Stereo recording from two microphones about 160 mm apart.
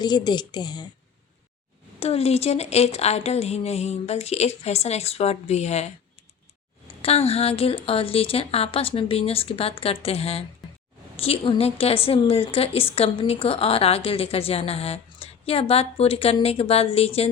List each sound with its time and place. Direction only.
0.0 s speech: 25° left (ahead or behind)
2.0 s a woman's voice: 40° left (ahead or behind)